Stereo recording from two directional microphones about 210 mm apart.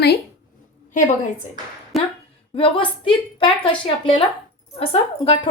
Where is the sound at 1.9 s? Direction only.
Centre (ahead or behind).